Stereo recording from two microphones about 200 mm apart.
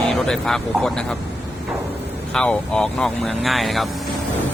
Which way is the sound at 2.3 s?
5° left (ahead or behind).